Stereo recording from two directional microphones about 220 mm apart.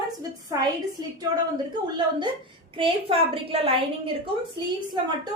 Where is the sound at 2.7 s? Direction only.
25° right (ahead or behind).